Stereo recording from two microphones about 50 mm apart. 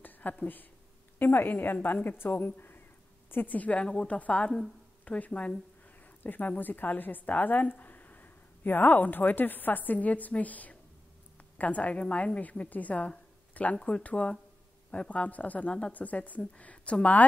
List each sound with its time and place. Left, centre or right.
0.0 s a woman's voice: left
3.5 s speech: left
3.8 s a woman's voice: centre
6.2 s a woman's voice: left